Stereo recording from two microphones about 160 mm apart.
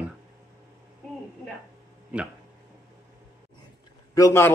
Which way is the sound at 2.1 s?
10° right (ahead or behind).